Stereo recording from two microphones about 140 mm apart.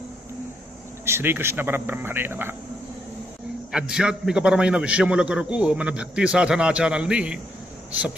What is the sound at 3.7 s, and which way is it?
A man's voice, 5° right (ahead or behind).